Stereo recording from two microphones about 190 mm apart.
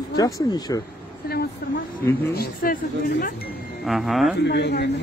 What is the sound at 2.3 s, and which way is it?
Speech, 50° left (ahead or behind).